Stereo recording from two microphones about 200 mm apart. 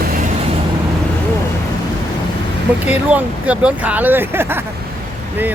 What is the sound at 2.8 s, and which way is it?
Speech, 5° right (ahead or behind).